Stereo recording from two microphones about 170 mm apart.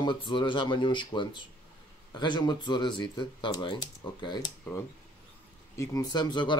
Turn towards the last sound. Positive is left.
turn(degrees=25)  # may be behind; listen again after turning